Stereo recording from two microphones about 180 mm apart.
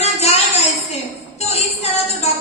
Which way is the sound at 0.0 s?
35° left (ahead or behind).